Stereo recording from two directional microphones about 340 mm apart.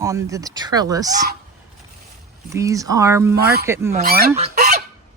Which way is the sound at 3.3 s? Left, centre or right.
Right.